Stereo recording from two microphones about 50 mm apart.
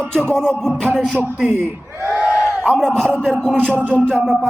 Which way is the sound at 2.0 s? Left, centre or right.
Right.